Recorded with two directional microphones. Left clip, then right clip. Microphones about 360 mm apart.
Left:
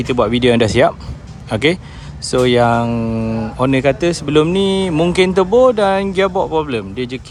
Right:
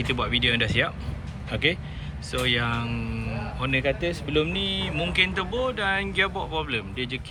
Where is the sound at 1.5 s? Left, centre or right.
Left.